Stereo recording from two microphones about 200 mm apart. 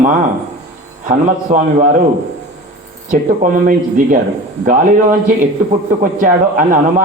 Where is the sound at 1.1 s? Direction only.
40° right (ahead or behind).